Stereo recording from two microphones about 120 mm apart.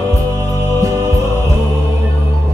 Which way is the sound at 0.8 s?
25° right (ahead or behind).